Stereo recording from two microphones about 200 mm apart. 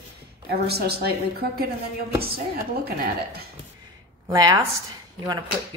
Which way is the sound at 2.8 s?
50° right (ahead or behind).